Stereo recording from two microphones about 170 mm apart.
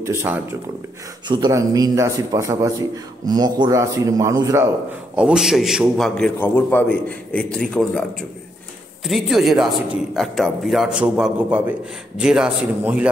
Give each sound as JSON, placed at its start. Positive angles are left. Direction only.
{"t": 0.0, "sound": "a man's voice", "side_deg": -15}
{"t": 5.1, "sound": "a man's voice", "side_deg": -5}
{"t": 9.0, "sound": "a man's voice", "side_deg": 0}